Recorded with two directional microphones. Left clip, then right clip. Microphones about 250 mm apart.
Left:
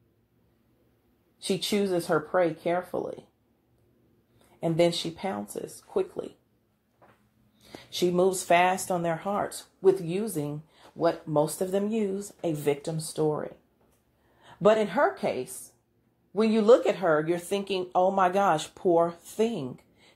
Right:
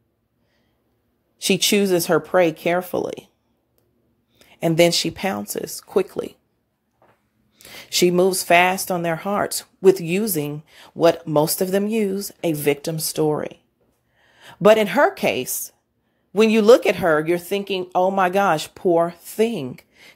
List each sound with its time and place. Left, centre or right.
1.4 s speech: right
4.6 s speech: right
7.8 s speech: right